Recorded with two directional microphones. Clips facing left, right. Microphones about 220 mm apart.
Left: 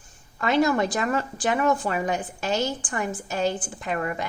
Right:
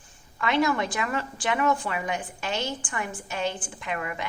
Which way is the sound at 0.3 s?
40° left (ahead or behind).